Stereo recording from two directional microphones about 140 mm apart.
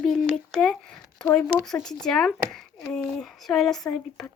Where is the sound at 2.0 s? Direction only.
5° left (ahead or behind).